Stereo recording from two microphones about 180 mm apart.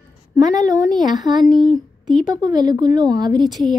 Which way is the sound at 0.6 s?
20° right (ahead or behind).